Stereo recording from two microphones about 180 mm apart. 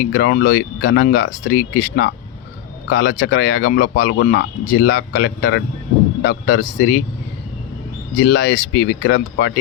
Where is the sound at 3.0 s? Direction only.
70° left (ahead or behind).